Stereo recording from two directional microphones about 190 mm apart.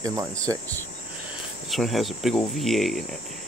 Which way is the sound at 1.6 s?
Centre (ahead or behind).